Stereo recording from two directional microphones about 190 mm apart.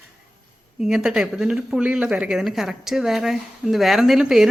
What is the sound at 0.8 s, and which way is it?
Speech, 5° right (ahead or behind).